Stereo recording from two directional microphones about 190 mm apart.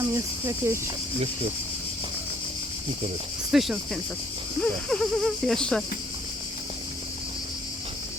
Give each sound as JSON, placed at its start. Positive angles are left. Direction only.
{"t": 0.0, "sound": "speech", "side_deg": -15}
{"t": 3.5, "sound": "speech", "side_deg": 0}